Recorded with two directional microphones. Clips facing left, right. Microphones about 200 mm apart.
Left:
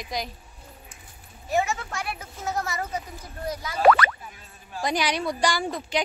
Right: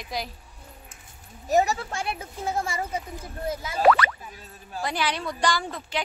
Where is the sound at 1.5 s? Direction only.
40° right (ahead or behind).